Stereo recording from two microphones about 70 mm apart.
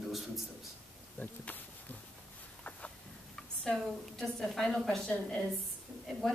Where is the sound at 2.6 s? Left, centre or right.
Centre.